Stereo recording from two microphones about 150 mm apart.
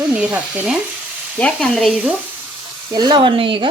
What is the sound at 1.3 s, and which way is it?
Stir, 5° left (ahead or behind).